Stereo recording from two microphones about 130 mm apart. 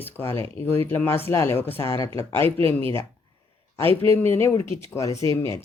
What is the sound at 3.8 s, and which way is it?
Speech, 45° right (ahead or behind).